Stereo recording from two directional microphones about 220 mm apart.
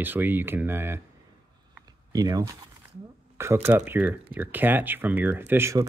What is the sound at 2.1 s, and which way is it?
Speech, 15° right (ahead or behind).